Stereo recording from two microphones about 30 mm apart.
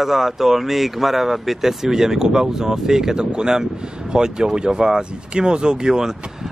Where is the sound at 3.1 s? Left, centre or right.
Right.